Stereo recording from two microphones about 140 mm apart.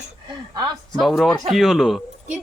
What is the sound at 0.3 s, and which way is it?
Speech, 35° right (ahead or behind).